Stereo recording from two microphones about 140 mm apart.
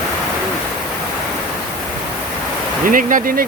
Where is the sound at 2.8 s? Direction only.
75° right (ahead or behind).